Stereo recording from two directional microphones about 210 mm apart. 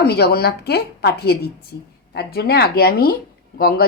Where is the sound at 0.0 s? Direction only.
50° left (ahead or behind).